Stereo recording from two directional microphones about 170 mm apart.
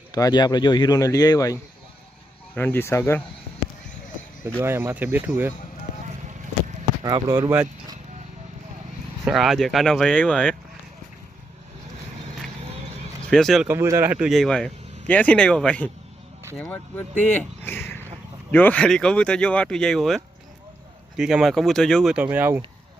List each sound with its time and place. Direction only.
0.1 s speech: 25° left (ahead or behind)
2.6 s speech: 10° left (ahead or behind)
4.6 s speech: 15° right (ahead or behind)
7.0 s speech: 25° right (ahead or behind)
9.2 s speech: centre (ahead or behind)
13.3 s speech: centre (ahead or behind)
13.7 s speech: 15° right (ahead or behind)